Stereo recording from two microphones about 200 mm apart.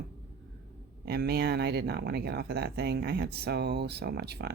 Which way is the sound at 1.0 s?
55° right (ahead or behind).